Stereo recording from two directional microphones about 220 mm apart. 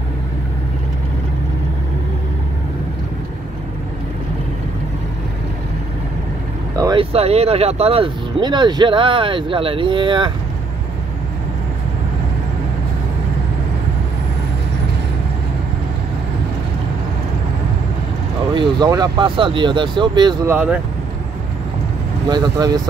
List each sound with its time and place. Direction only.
6.8 s speech: 20° right (ahead or behind)
18.5 s speech: 20° right (ahead or behind)
20.5 s speech: 5° right (ahead or behind)
22.3 s speech: 20° right (ahead or behind)